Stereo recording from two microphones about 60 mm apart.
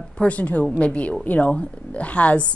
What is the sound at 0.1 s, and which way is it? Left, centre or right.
A woman's voice, left.